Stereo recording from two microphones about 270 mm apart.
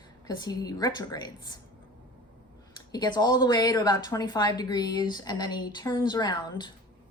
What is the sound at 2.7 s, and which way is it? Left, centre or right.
Speech, centre.